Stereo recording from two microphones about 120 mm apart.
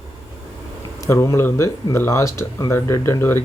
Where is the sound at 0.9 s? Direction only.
25° left (ahead or behind).